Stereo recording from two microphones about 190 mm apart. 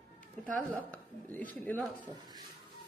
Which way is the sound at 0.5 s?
10° left (ahead or behind).